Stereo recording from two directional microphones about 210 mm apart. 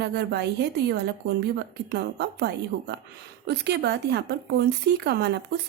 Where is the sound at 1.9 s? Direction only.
50° right (ahead or behind).